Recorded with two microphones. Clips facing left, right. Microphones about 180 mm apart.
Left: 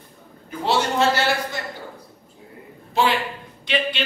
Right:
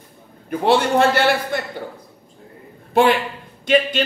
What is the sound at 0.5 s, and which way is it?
A man's voice, 55° right (ahead or behind).